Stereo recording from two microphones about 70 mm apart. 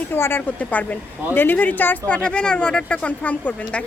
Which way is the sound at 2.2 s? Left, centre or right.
Centre.